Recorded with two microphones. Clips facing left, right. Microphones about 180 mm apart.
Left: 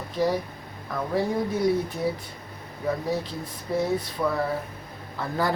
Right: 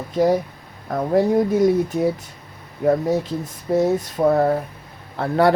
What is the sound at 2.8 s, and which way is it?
Speech, 45° right (ahead or behind).